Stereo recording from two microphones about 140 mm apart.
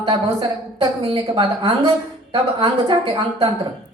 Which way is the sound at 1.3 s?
30° right (ahead or behind).